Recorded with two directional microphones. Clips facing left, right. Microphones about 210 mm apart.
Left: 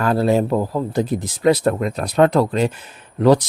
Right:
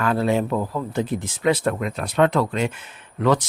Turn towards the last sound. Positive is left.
turn(degrees=35)  # may be behind; listen again after turning